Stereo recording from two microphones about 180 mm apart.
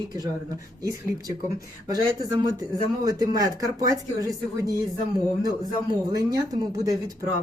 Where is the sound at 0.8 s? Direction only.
20° right (ahead or behind).